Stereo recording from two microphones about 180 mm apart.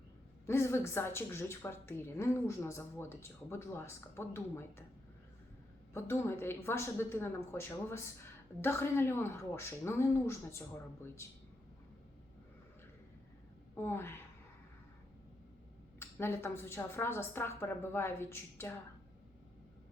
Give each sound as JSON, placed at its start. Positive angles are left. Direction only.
{"t": 0.4, "sound": "speech", "side_deg": 15}
{"t": 5.9, "sound": "speech", "side_deg": 15}
{"t": 13.7, "sound": "speech", "side_deg": 15}
{"t": 16.0, "sound": "speech", "side_deg": 15}